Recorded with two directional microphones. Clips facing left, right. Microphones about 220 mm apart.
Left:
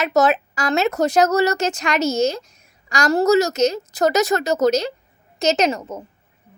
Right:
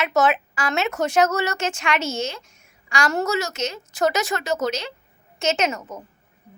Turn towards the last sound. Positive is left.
turn(degrees=25)  # may be behind; listen again after turning